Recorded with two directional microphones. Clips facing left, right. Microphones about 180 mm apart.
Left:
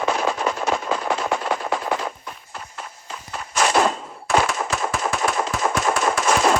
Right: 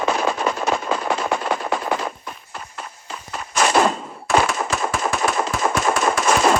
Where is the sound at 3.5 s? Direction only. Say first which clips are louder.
Right 2 dB; 75° right (ahead or behind).